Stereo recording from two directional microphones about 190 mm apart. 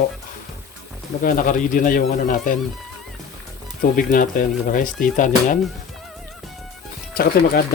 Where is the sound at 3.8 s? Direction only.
45° left (ahead or behind).